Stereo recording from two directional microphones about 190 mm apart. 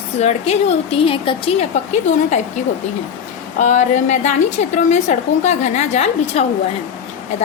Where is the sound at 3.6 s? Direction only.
40° left (ahead or behind).